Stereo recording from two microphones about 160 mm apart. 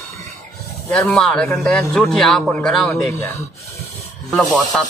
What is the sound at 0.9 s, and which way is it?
A man's voice, 5° left (ahead or behind).